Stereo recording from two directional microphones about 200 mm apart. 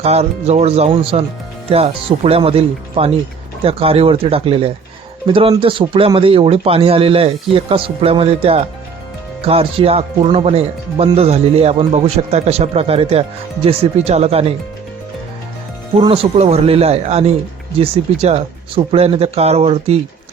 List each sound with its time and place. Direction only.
0.0 s a man's voice: 30° right (ahead or behind)
16.0 s speech: 30° right (ahead or behind)